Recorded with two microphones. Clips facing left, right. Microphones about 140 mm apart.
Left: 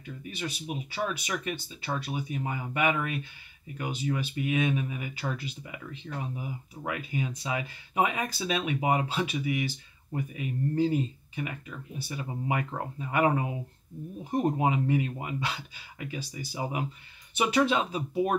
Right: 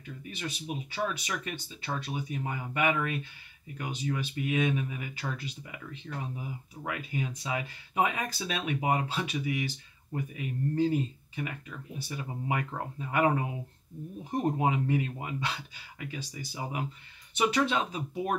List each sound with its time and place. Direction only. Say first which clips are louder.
0.4 s speech: left 1 dB; 5° left (ahead or behind)
16.5 s speech: left 3 dB; 15° left (ahead or behind)